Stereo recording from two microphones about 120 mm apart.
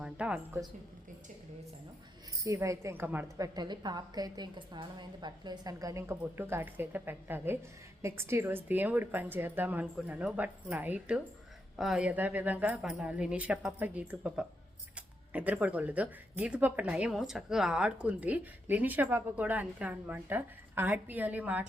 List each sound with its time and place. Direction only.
0.0 s speech: 10° right (ahead or behind)
2.4 s a woman's voice: 25° right (ahead or behind)
3.3 s a woman's voice: 30° right (ahead or behind); by 21.6 s 15° right (ahead or behind)